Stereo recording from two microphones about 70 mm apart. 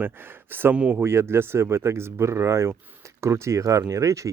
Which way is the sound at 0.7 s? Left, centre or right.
Centre.